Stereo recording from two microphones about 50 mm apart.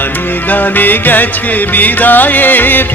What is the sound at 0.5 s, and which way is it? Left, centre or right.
Music, left.